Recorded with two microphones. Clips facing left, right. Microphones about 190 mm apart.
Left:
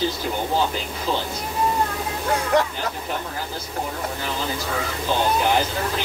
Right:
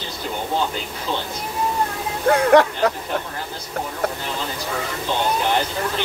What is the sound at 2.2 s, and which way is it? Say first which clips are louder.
Speech: right 7 dB; 65° right (ahead or behind).